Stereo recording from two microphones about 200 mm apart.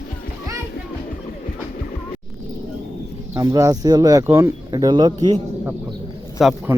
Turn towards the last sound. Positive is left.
turn(degrees=0)  # may be behind; listen again after turning